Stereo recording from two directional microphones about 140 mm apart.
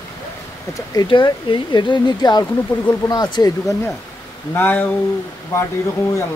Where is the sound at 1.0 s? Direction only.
35° left (ahead or behind).